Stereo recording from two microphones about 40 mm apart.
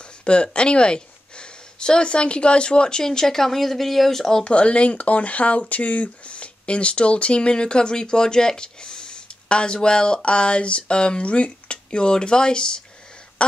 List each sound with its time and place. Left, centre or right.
0.2 s speech: left
4.5 s speech: left
13.4 s a sound: left